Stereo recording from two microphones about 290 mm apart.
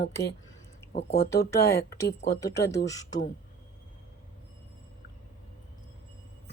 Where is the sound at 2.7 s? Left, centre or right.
Centre.